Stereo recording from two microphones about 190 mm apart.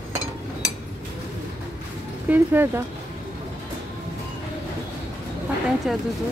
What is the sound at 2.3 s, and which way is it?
Speech, 10° right (ahead or behind).